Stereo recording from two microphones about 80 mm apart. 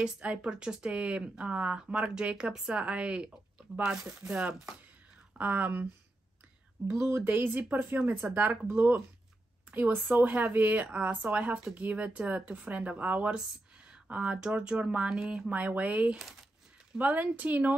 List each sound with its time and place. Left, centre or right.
0.0 s speech: centre
5.4 s speech: right
6.9 s speech: right
7.2 s speech: right